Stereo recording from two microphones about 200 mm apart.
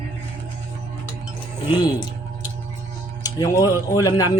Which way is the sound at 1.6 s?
10° right (ahead or behind).